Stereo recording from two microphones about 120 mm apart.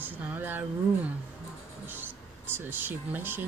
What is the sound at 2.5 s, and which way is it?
Speech, 15° right (ahead or behind).